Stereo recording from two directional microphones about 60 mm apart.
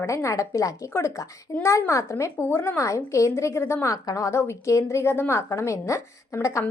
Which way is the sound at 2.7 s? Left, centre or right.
Left.